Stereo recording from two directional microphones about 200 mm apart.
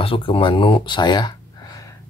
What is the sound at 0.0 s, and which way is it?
Speech, 25° left (ahead or behind).